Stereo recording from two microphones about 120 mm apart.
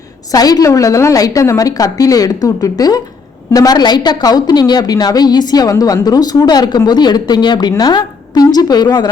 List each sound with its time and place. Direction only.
0.3 s a woman's voice: 30° left (ahead or behind)